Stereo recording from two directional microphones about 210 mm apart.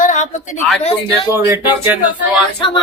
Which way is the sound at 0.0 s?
35° left (ahead or behind).